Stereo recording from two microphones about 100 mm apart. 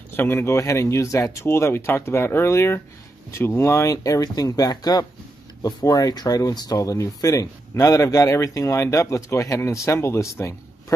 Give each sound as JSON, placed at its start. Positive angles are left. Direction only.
{"t": 0.1, "sound": "speech", "side_deg": 20}